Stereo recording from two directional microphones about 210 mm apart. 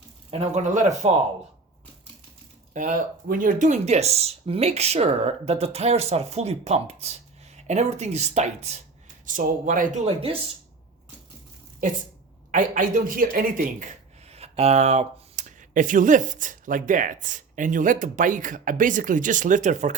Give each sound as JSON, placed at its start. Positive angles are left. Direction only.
{"t": 0.3, "sound": "speech", "side_deg": -30}
{"t": 2.7, "sound": "speech", "side_deg": -40}
{"t": 12.5, "sound": "speech", "side_deg": -40}